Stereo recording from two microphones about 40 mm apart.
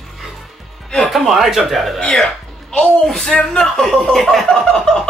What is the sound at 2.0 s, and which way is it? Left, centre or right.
Music, centre.